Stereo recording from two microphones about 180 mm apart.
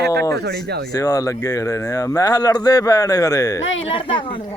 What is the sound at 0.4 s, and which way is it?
Speech, 60° right (ahead or behind).